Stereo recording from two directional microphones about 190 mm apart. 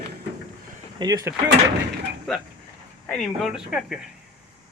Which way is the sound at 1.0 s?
20° right (ahead or behind).